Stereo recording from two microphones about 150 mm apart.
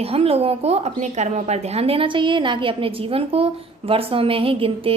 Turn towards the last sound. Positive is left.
turn(degrees=-35)  # may be behind; listen again after turning